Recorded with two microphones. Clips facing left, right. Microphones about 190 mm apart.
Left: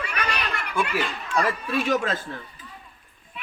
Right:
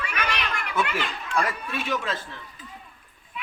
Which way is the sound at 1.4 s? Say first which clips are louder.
Left 5 dB; 40° left (ahead or behind).